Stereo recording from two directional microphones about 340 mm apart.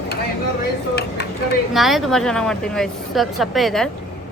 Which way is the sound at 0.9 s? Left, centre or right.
Left.